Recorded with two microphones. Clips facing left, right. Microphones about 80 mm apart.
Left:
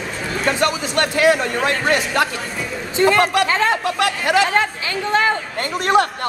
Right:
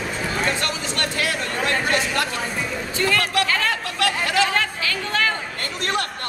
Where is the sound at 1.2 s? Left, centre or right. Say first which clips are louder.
Left 10 dB; left.